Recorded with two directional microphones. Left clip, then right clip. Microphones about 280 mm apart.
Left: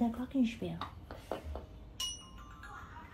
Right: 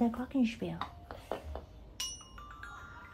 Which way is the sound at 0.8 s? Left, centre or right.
Centre.